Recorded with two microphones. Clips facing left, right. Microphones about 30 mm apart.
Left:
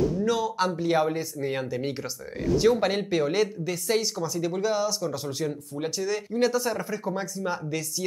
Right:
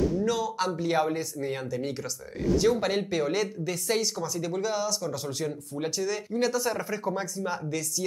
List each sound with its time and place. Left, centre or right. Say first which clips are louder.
0.0 s speech: left 2 dB; centre